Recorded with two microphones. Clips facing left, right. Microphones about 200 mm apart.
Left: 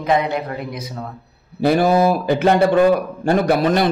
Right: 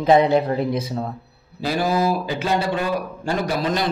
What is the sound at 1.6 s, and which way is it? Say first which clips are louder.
A man's voice: left 6 dB; 55° left (ahead or behind).